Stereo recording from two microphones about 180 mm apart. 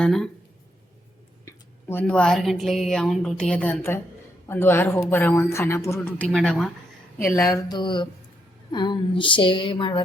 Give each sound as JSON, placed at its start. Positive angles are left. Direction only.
{"t": 0.0, "sound": "speech", "side_deg": 5}
{"t": 1.5, "sound": "speech", "side_deg": 10}
{"t": 6.2, "sound": "speech", "side_deg": 5}
{"t": 7.2, "sound": "speech", "side_deg": 15}